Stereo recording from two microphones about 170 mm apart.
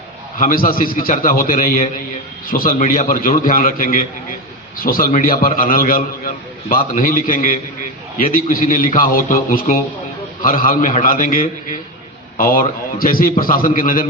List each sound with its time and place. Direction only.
0.3 s a man's voice: 55° left (ahead or behind)
2.7 s a man's voice: 45° left (ahead or behind)
12.4 s a man's voice: 55° left (ahead or behind)